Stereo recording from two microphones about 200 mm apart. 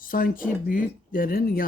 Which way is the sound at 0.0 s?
45° left (ahead or behind).